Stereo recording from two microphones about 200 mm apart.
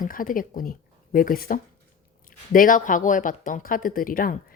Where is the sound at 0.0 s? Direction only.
45° left (ahead or behind).